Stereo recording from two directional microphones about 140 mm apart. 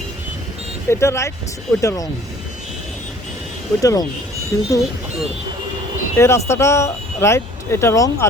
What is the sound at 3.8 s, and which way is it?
Speech, 25° left (ahead or behind).